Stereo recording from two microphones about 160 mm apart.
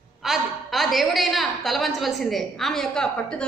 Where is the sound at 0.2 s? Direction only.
Centre (ahead or behind).